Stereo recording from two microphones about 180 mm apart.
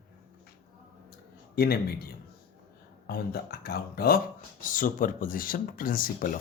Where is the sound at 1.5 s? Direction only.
60° left (ahead or behind).